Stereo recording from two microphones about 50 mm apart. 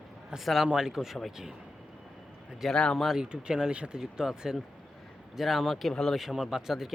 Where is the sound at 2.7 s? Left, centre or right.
Centre.